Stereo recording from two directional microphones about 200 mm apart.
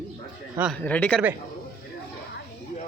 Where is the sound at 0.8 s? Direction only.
5° left (ahead or behind).